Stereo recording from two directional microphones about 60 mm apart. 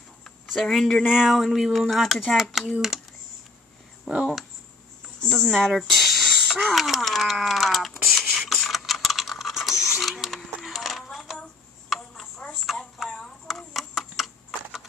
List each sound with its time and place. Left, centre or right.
0.5 s speech: centre
1.0 s speech: centre
4.1 s speech: centre
5.4 s speech: centre
6.5 s a sound: centre
9.9 s coin: centre
12.4 s telephone: centre
13.0 s typing: centre